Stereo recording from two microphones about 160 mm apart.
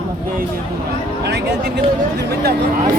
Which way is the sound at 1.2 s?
90° right.